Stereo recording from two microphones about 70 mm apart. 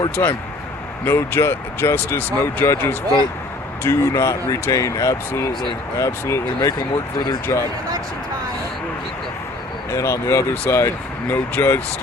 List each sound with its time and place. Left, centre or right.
0.2 s speech: left
6.6 s speech: left
9.9 s speech: left